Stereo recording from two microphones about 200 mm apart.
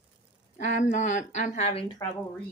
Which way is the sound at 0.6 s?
35° left (ahead or behind).